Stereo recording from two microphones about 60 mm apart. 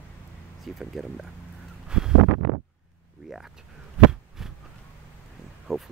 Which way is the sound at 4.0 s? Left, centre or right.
Centre.